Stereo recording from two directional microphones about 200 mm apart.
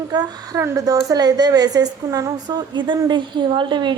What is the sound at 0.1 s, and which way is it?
A woman's voice, 20° right (ahead or behind).